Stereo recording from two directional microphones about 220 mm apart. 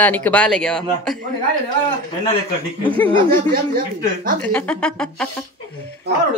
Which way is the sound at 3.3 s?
40° right (ahead or behind).